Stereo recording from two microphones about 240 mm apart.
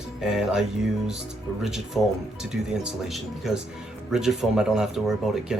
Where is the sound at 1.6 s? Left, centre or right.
Centre.